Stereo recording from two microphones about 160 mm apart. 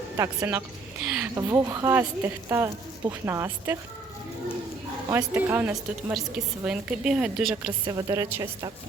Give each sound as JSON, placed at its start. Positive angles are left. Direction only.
{"t": 0.2, "sound": "a woman's voice", "side_deg": -15}
{"t": 1.0, "sound": "a sound", "side_deg": -5}
{"t": 1.4, "sound": "a woman's voice", "side_deg": -15}
{"t": 5.0, "sound": "a woman's voice", "side_deg": -15}
{"t": 7.9, "sound": "a woman's voice", "side_deg": -20}